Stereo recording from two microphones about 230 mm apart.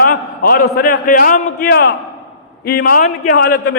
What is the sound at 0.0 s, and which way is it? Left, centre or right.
A man's voice, left.